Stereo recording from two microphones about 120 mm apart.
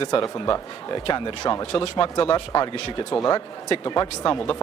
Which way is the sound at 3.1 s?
25° left (ahead or behind).